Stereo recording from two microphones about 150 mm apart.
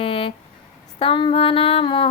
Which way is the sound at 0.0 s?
35° left (ahead or behind).